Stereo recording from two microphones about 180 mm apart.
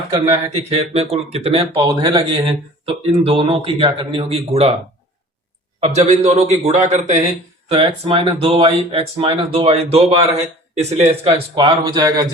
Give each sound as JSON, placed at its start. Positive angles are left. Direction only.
{"t": 0.1, "sound": "speech", "side_deg": -30}
{"t": 1.8, "sound": "speech", "side_deg": -20}
{"t": 2.8, "sound": "speech", "side_deg": -30}
{"t": 5.8, "sound": "speech", "side_deg": -40}